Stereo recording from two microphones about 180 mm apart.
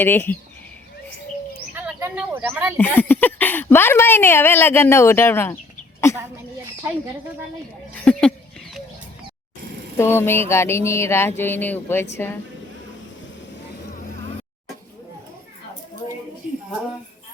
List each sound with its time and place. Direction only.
0.0 s a woman's voice: 10° left (ahead or behind)
1.7 s speech: 10° right (ahead or behind)
2.7 s a woman's voice: 10° left (ahead or behind)
7.9 s a woman's voice: 5° left (ahead or behind)
10.0 s a woman's voice: 15° left (ahead or behind)